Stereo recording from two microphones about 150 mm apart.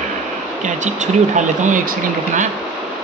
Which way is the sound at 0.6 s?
55° right (ahead or behind).